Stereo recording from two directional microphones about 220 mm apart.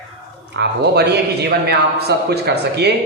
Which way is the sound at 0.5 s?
50° right (ahead or behind).